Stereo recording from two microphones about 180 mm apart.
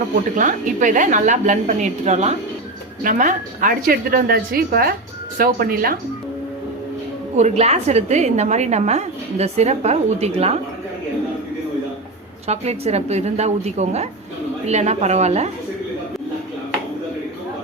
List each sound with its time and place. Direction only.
0.3 s a woman's voice: 45° right (ahead or behind)
7.3 s a woman's voice: 40° right (ahead or behind)
12.5 s a woman's voice: 35° right (ahead or behind)